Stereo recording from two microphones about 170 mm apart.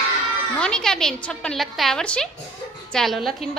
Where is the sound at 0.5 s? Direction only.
5° left (ahead or behind).